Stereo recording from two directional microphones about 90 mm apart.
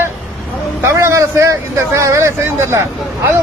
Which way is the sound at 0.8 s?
30° right (ahead or behind).